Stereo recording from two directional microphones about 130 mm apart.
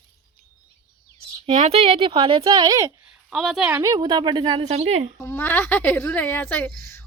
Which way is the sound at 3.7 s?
25° right (ahead or behind).